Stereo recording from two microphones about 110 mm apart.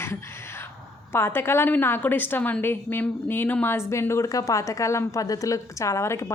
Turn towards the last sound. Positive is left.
turn(degrees=25)  # may be behind; listen again after turning